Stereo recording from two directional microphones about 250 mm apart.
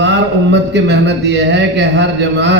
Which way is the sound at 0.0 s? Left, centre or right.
Right.